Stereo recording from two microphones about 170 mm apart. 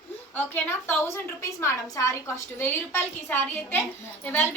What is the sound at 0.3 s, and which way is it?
A woman's voice, 10° left (ahead or behind).